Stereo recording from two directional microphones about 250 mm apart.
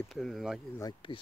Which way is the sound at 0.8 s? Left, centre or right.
Left.